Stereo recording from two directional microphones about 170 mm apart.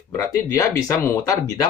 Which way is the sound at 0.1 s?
15° left (ahead or behind).